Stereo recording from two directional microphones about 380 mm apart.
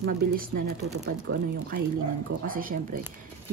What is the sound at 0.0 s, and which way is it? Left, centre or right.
Speech, right.